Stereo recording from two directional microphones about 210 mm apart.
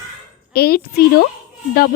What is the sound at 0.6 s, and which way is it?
Speech, 50° left (ahead or behind).